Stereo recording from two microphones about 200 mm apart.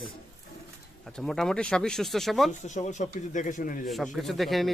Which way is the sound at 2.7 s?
35° left (ahead or behind).